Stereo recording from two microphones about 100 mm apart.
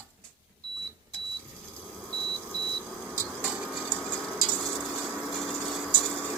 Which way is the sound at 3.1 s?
15° right (ahead or behind).